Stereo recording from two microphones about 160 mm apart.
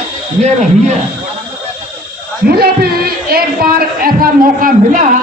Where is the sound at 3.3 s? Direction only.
70° right (ahead or behind).